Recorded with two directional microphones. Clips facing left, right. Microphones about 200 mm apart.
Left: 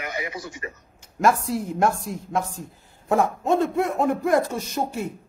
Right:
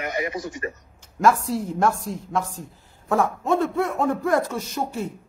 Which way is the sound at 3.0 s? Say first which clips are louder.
Left 1 dB; 20° left (ahead or behind).